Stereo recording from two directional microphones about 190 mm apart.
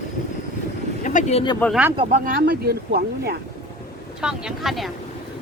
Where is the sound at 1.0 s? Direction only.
40° left (ahead or behind).